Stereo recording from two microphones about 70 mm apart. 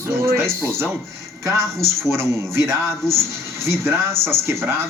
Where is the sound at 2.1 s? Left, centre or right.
Right.